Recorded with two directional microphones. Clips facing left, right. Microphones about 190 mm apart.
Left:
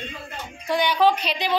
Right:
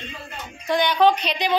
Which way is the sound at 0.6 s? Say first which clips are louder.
Right 2 dB; 10° left (ahead or behind).